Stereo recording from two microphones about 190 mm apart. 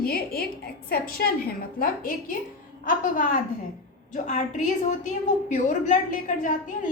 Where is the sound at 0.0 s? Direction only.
55° left (ahead or behind).